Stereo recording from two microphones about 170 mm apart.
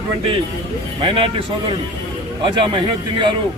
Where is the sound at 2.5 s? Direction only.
30° right (ahead or behind).